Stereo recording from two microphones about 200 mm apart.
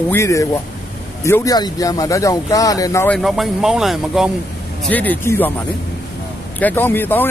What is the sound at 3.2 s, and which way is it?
Speech, centre (ahead or behind).